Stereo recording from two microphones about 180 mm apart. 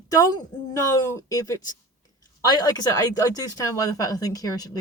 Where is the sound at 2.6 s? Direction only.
20° left (ahead or behind).